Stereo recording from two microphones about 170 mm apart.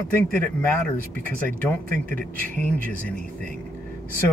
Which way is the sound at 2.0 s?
55° right (ahead or behind).